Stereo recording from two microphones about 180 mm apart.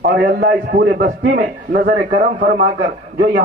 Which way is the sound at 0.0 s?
60° right (ahead or behind).